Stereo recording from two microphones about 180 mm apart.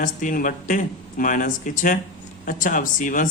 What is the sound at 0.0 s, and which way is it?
Speech, 45° left (ahead or behind).